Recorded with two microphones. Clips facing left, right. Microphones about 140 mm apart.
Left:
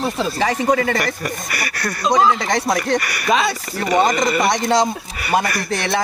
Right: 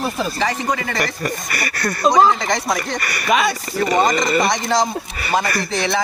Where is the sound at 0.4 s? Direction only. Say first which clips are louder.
Left 6 dB; 50° left (ahead or behind).